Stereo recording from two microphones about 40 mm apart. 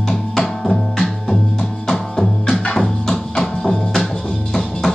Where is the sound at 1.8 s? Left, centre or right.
Centre.